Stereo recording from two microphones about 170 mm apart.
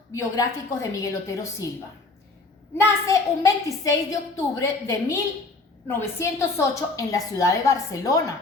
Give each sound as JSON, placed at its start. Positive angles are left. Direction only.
{"t": 0.1, "sound": "a woman's voice", "side_deg": 20}
{"t": 2.7, "sound": "a child's voice", "side_deg": 15}